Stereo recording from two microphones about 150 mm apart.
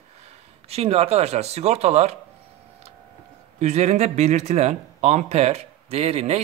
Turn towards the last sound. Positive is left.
turn(degrees=-45)  # may be behind; listen again after turning